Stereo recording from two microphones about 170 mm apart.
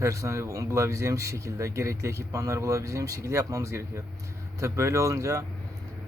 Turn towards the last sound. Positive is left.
turn(degrees=-20)  # may be behind; listen again after turning